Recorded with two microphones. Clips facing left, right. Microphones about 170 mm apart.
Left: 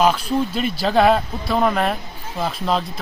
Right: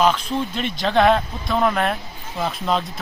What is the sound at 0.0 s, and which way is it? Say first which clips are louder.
Speech: left 2 dB; 10° left (ahead or behind).